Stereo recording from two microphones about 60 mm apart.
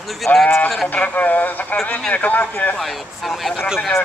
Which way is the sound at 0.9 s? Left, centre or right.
Left.